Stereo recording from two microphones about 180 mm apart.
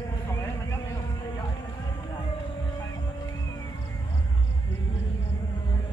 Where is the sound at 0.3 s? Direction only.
15° left (ahead or behind).